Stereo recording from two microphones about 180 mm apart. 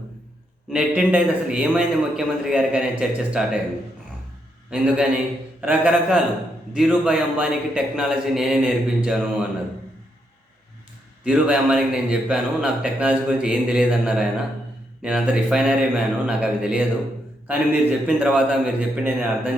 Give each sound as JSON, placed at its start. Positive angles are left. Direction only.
{"t": 0.7, "sound": "a man's voice", "side_deg": -5}
{"t": 4.7, "sound": "a man's voice", "side_deg": -5}
{"t": 11.2, "sound": "a man's voice", "side_deg": -5}